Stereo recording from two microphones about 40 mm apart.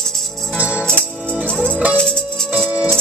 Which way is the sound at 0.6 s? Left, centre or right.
Right.